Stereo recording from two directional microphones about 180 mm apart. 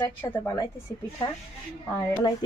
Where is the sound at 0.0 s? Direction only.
10° left (ahead or behind).